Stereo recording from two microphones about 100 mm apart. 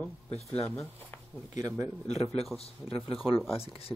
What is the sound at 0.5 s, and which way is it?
Music, 10° left (ahead or behind).